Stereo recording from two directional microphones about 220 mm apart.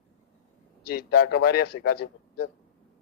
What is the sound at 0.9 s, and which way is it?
A man's voice, 45° left (ahead or behind).